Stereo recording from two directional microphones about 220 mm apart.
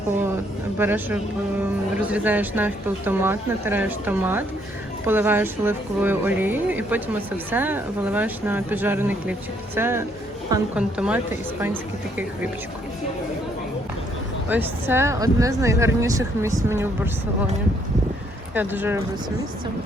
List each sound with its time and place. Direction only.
0.8 s speech: 10° right (ahead or behind)
14.5 s speech: 10° right (ahead or behind)
18.5 s speech: 10° right (ahead or behind)